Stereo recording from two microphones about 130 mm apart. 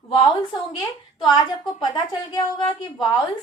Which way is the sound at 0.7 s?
40° left (ahead or behind).